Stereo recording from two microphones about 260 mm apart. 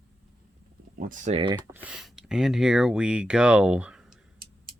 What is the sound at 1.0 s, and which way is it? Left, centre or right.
Speech, right.